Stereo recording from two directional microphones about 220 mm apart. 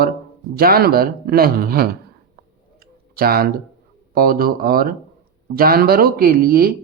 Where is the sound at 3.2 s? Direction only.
45° right (ahead or behind).